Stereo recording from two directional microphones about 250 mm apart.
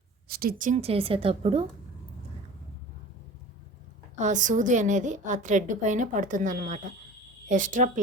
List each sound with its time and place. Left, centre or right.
0.3 s a woman's voice: right
4.2 s a woman's voice: right